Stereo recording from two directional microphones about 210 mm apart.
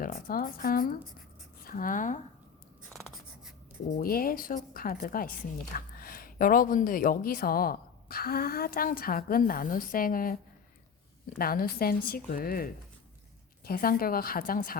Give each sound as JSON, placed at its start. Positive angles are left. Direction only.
{"t": 0.0, "sound": "speech", "side_deg": 45}
{"t": 2.9, "sound": "writing", "side_deg": 0}
{"t": 4.0, "sound": "speech", "side_deg": 45}
{"t": 11.3, "sound": "speech", "side_deg": 45}